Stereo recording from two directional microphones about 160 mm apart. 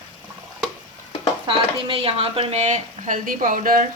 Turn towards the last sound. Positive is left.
turn(degrees=-60)  # may be behind; listen again after turning